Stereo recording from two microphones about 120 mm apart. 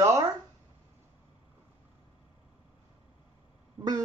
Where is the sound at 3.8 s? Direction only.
30° right (ahead or behind).